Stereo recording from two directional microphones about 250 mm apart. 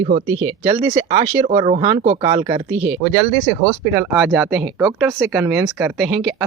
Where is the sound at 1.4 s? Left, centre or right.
Right.